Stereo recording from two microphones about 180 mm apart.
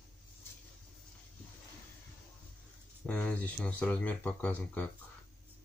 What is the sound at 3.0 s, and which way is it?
Speech, 5° left (ahead or behind).